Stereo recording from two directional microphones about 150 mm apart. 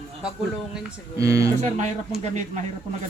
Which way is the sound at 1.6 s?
50° right (ahead or behind).